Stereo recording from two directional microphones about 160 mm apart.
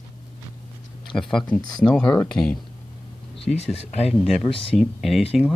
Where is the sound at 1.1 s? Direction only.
5° left (ahead or behind).